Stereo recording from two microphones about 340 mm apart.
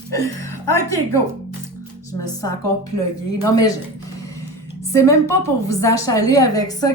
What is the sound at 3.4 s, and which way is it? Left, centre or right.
Speech, centre.